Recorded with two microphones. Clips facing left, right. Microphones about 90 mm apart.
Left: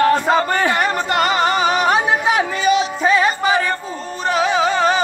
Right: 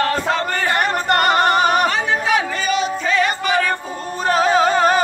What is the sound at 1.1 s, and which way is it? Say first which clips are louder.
Music: right 4 dB; 50° right (ahead or behind).